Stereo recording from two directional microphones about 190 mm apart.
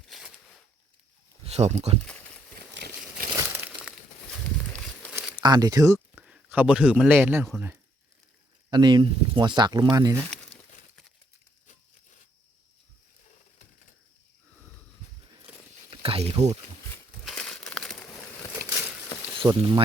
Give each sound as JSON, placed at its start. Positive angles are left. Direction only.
{"t": 1.5, "sound": "speech", "side_deg": -35}
{"t": 2.0, "sound": "a sound", "side_deg": 5}
{"t": 2.7, "sound": "crumpling", "side_deg": -55}
{"t": 3.5, "sound": "crumpling", "side_deg": -10}
{"t": 5.4, "sound": "speech", "side_deg": -20}
{"t": 8.7, "sound": "speech", "side_deg": -25}
{"t": 15.9, "sound": "zipper", "side_deg": -30}
{"t": 17.2, "sound": "crumpling", "side_deg": 5}
{"t": 18.6, "sound": "a sound", "side_deg": -60}
{"t": 19.4, "sound": "speech", "side_deg": -25}